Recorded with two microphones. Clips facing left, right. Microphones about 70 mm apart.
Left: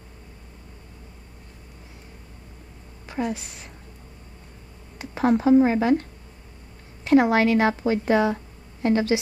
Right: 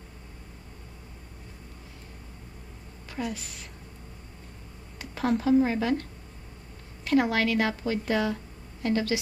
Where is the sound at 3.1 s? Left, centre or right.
Left.